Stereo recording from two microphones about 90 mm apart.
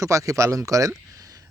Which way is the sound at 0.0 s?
35° right (ahead or behind).